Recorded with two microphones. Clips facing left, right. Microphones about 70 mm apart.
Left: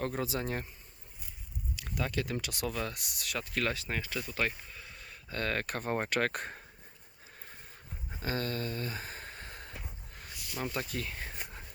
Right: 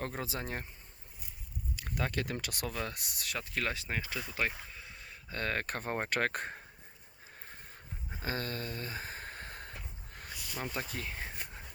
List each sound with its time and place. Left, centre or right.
0.0 s speech: right
1.7 s speech: right
8.2 s a sound: right
10.6 s speech: right